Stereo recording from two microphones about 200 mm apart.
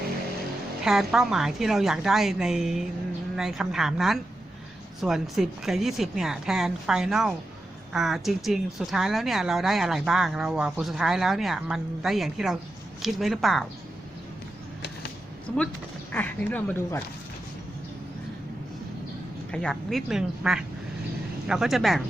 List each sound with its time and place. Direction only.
0.9 s a woman's voice: centre (ahead or behind)
15.5 s a woman's voice: 5° left (ahead or behind)
19.5 s a woman's voice: 5° left (ahead or behind)